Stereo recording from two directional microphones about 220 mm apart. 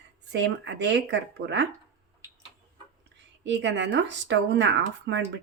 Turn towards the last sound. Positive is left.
turn(degrees=-55)  # may be behind; listen again after turning